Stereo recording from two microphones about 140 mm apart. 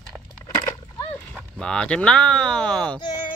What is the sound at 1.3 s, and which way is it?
Speech, 5° left (ahead or behind).